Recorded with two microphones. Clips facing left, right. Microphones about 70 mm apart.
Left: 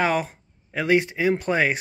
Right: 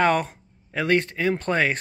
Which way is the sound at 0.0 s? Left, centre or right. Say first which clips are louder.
Right 2 dB; centre.